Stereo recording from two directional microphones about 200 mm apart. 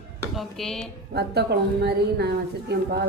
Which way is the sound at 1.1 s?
55° right (ahead or behind).